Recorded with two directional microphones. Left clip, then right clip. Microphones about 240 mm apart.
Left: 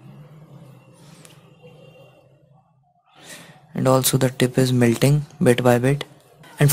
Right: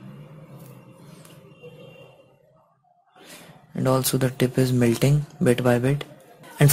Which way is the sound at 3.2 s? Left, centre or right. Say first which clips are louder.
Left 3 dB; centre.